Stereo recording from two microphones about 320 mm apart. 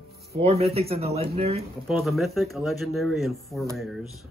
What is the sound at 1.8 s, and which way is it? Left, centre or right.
Speech, centre.